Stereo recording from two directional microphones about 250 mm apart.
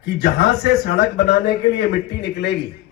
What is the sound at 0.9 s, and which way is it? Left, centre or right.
A man's voice, left.